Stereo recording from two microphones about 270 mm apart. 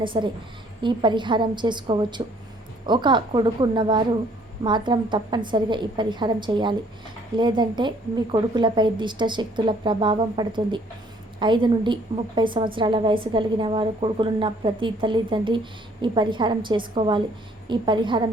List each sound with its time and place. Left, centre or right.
0.0 s a woman's voice: centre